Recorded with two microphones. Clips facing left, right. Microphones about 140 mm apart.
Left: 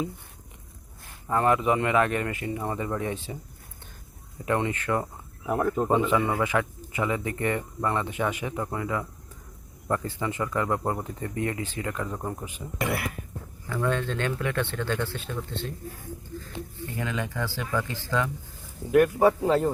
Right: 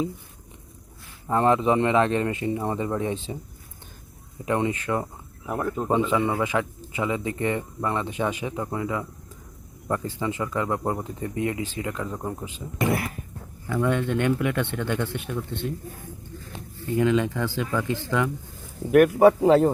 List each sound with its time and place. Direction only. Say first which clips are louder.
1.3 s a man's voice: right 2 dB; 25° right (ahead or behind)
4.4 s a man's voice: right 2 dB; 20° right (ahead or behind)
5.5 s speech: left 2 dB; centre (ahead or behind)
5.9 s a man's voice: right 4 dB; 20° right (ahead or behind)
12.1 s speech: right 2 dB; centre (ahead or behind)
13.7 s speech: right 4 dB; 15° right (ahead or behind)
17.0 s a man's voice: right 9 dB; 20° right (ahead or behind)
18.9 s speech: right 4 dB; 65° right (ahead or behind)